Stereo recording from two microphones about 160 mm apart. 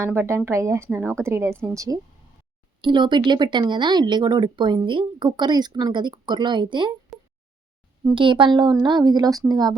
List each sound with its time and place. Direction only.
0.0 s a woman's voice: 15° right (ahead or behind)